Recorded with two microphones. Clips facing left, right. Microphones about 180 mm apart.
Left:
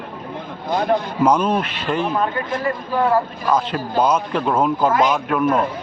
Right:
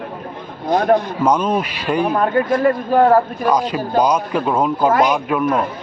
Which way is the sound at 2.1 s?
50° right (ahead or behind).